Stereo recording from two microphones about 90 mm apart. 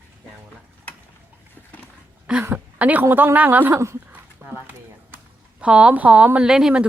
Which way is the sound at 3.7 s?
35° right (ahead or behind).